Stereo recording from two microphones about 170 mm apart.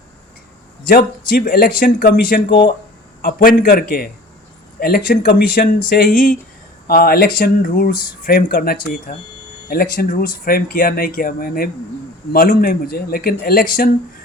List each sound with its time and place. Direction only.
0.9 s speech: 60° left (ahead or behind)
3.2 s speech: 55° left (ahead or behind)